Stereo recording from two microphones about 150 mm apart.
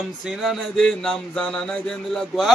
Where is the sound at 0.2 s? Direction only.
Centre (ahead or behind).